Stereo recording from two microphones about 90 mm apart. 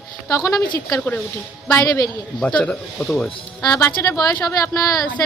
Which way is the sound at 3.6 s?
45° left (ahead or behind).